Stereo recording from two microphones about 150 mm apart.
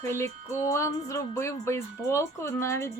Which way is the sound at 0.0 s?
15° left (ahead or behind).